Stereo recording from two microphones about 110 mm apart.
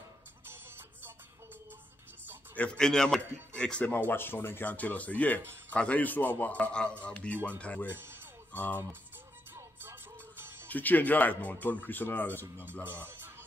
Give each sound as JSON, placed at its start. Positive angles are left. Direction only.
{"t": 0.5, "sound": "music", "side_deg": -20}
{"t": 2.5, "sound": "speech", "side_deg": 10}
{"t": 7.9, "sound": "speech", "side_deg": -20}
{"t": 8.5, "sound": "speech", "side_deg": 15}
{"t": 9.5, "sound": "music", "side_deg": -20}
{"t": 10.7, "sound": "speech", "side_deg": 15}
{"t": 12.8, "sound": "speech", "side_deg": -20}